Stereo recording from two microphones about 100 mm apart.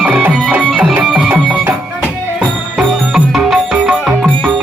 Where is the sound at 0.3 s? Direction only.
5° left (ahead or behind).